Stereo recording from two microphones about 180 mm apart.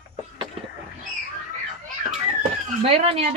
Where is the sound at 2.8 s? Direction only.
35° right (ahead or behind).